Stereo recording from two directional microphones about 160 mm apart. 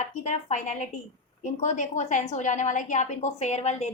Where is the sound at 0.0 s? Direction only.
50° left (ahead or behind).